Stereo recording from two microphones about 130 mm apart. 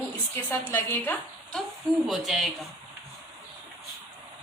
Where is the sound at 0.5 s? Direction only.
15° left (ahead or behind).